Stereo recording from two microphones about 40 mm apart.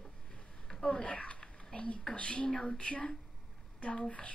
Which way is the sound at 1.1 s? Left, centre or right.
Left.